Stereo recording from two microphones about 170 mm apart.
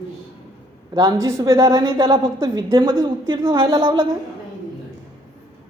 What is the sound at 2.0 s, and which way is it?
Speech, 30° right (ahead or behind).